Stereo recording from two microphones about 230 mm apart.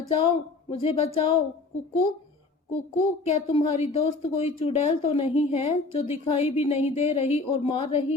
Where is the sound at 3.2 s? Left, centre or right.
Left.